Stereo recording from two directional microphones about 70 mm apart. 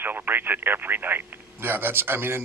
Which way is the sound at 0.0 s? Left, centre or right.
Right.